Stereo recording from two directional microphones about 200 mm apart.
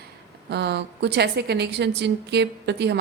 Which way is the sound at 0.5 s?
55° right (ahead or behind).